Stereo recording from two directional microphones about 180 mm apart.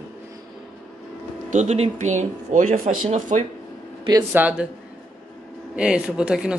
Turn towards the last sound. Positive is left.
turn(degrees=-5)  # may be behind; listen again after turning